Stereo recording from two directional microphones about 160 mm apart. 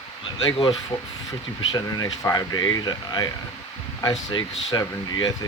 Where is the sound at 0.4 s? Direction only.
25° left (ahead or behind).